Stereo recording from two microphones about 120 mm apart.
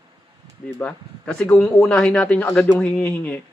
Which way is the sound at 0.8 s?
5° left (ahead or behind).